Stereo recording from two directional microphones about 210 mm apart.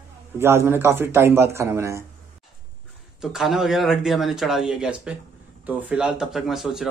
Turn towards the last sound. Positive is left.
turn(degrees=0)  # may be behind; listen again after turning